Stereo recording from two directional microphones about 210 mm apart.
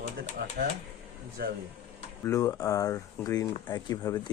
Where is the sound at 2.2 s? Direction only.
15° left (ahead or behind).